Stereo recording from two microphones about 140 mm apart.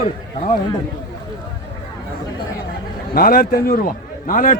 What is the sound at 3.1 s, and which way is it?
A man's voice, 90° left.